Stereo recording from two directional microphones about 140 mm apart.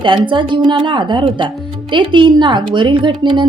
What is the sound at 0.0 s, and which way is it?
A woman's voice, 35° right (ahead or behind).